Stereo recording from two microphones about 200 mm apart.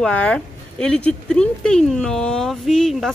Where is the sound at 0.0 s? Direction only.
5° left (ahead or behind).